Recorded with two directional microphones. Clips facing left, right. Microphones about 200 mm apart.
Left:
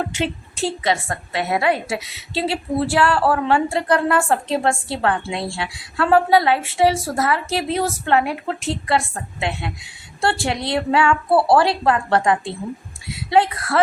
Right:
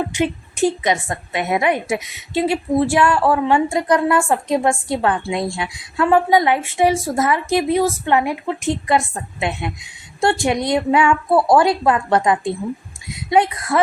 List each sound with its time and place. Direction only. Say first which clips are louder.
0.1 s a woman's voice: right 4 dB; 15° right (ahead or behind)
11.3 s speech: left 1 dB; 5° left (ahead or behind)
11.5 s a woman's voice: right 2 dB; 20° right (ahead or behind)